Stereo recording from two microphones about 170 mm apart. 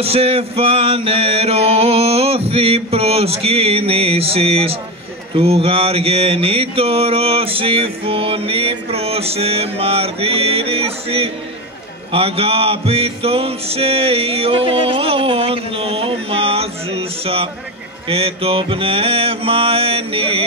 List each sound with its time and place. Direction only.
0.0 s mantra: 35° right (ahead or behind)